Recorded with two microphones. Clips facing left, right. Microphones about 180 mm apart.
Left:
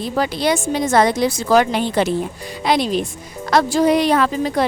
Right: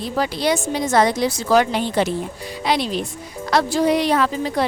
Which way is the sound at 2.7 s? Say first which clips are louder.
Left 3 dB; 50° left (ahead or behind).